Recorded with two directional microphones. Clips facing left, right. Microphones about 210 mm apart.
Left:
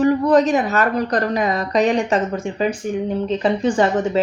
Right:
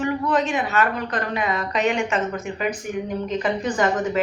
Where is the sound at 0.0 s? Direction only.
40° left (ahead or behind).